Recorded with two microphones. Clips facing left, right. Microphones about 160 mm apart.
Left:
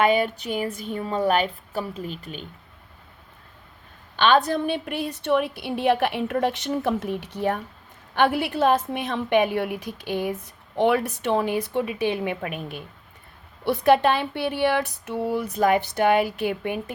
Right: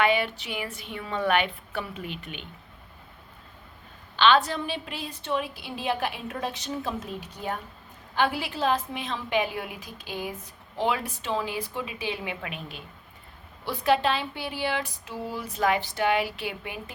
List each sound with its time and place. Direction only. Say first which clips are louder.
0.0 s a woman's voice: left 4 dB; 45° left (ahead or behind)
4.2 s a woman's voice: left 2 dB; 50° left (ahead or behind)